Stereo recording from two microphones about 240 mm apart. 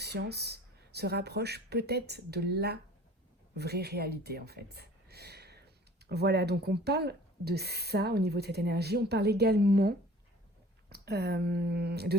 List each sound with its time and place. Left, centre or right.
0.0 s speech: right